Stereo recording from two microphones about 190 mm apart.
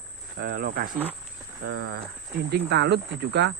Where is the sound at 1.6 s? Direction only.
65° right (ahead or behind).